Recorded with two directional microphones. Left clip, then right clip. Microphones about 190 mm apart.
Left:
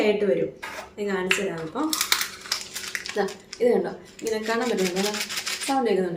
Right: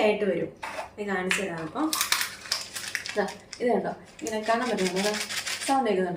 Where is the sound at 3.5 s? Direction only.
15° left (ahead or behind).